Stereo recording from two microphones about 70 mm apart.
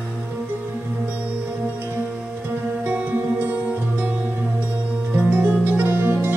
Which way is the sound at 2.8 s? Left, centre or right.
Right.